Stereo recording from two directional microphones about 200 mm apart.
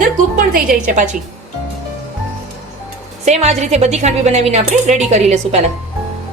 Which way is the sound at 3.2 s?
35° right (ahead or behind).